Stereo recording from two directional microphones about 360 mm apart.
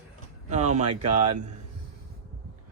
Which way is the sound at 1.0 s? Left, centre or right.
Right.